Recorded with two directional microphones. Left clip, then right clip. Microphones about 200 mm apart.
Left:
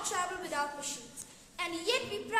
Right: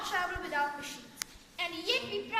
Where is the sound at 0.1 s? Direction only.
35° left (ahead or behind).